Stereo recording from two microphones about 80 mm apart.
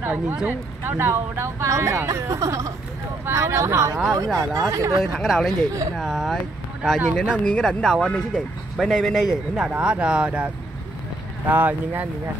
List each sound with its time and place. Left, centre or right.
0.0 s speech: right
5.0 s a man's voice: centre
7.2 s a man's voice: centre
9.7 s speech: centre